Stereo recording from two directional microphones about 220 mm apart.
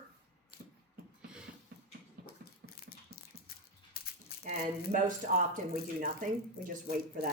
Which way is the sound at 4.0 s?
45° left (ahead or behind).